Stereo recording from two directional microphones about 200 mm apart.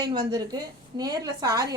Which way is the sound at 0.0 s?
20° right (ahead or behind).